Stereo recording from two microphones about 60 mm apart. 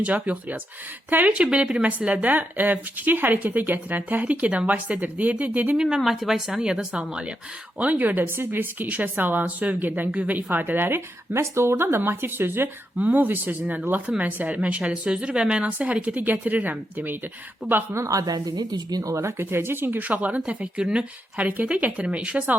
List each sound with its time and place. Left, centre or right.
0.0 s a woman's voice: right
5.7 s a woman's voice: centre; by 12.6 s right
13.0 s a woman's voice: right
13.2 s a woman's voice: right
17.6 s a woman's voice: centre
17.9 s a woman's voice: right
19.1 s a woman's voice: right
21.9 s a woman's voice: centre